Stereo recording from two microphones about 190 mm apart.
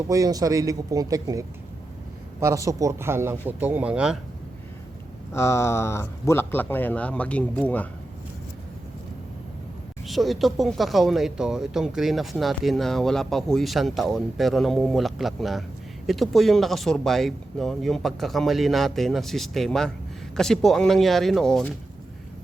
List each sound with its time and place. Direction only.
0.1 s a man's voice: 20° right (ahead or behind)
5.3 s speech: 15° left (ahead or behind)
10.1 s speech: centre (ahead or behind)